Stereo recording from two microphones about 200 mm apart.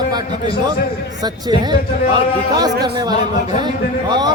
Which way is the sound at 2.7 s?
55° right (ahead or behind).